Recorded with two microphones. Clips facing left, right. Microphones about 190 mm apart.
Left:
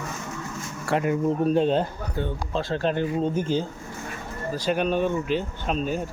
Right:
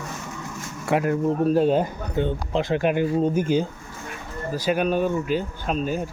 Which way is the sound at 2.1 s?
20° right (ahead or behind).